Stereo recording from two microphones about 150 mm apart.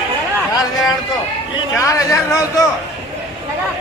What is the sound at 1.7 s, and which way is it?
Speech, 20° left (ahead or behind).